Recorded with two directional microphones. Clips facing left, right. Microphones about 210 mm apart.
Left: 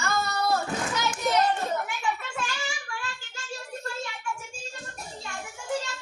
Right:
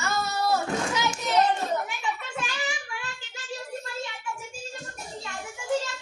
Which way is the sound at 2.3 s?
20° right (ahead or behind).